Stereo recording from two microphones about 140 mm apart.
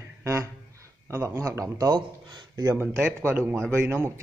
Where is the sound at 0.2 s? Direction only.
20° right (ahead or behind).